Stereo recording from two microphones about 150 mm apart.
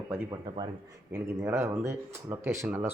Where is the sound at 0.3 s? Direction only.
30° right (ahead or behind).